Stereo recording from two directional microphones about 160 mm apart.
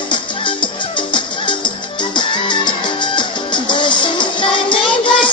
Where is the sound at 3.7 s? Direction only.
30° left (ahead or behind).